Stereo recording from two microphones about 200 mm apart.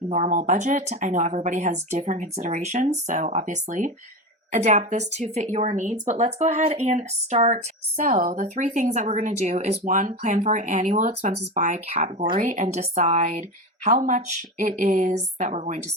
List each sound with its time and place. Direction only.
0.1 s speech: 40° right (ahead or behind)